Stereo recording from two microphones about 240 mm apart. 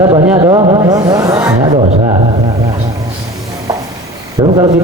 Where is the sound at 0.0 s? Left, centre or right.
Centre.